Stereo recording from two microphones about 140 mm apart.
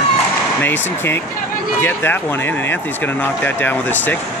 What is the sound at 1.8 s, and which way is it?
Speech, 15° left (ahead or behind).